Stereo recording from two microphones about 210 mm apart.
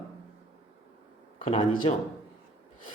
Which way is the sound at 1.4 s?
25° left (ahead or behind).